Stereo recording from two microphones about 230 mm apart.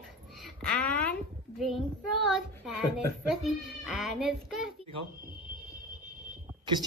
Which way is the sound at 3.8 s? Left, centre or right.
Centre.